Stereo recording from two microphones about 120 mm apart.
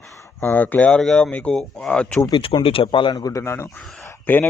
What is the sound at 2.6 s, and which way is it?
A man's voice, 50° left (ahead or behind).